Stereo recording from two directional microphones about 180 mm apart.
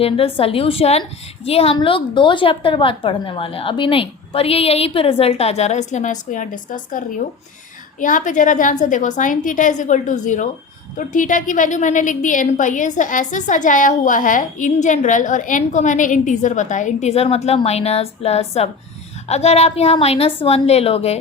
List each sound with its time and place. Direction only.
0.0 s a woman's voice: 30° left (ahead or behind)